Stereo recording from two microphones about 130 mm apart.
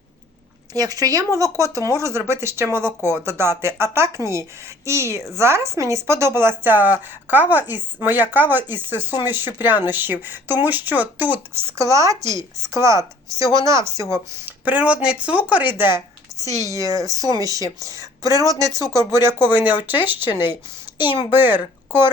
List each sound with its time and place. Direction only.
0.7 s a woman's voice: 30° right (ahead or behind); by 11.3 s 15° right (ahead or behind)
11.8 s a woman's voice: 25° right (ahead or behind)
16.4 s speech: 25° left (ahead or behind)
16.6 s a woman's voice: 25° right (ahead or behind)